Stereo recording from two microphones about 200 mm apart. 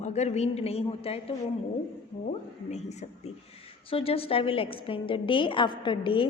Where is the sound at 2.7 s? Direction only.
35° left (ahead or behind).